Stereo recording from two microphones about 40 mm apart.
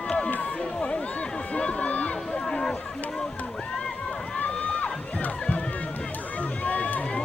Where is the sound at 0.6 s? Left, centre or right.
Left.